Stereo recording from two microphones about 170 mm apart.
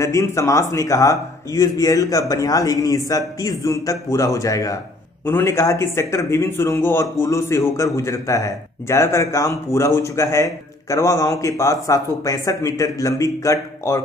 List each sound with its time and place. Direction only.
0.0 s speech: 20° left (ahead or behind)